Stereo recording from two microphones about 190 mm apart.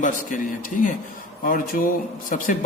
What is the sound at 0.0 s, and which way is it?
A man's voice, 45° left (ahead or behind).